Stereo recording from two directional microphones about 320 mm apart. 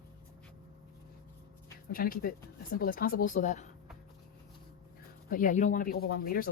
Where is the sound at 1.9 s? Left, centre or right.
Left.